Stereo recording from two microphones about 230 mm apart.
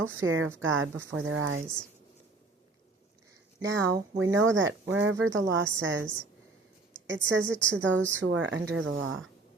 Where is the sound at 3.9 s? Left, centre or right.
Right.